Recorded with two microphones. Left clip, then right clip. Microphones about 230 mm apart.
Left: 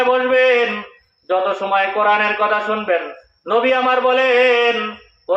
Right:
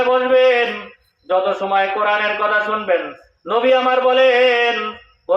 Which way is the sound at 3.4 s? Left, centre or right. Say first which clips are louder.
Right 1 dB; left.